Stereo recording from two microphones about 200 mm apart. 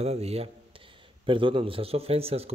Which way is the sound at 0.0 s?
30° right (ahead or behind).